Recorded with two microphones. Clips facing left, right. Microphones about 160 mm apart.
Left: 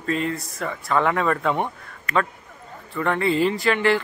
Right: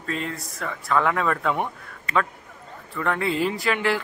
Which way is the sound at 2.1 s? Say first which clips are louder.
Left 1 dB; 30° right (ahead or behind).